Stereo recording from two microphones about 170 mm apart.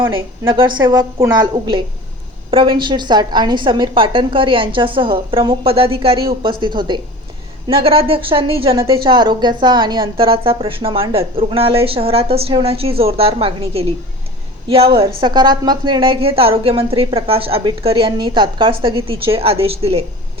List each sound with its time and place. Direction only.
0.0 s a woman's voice: 30° right (ahead or behind)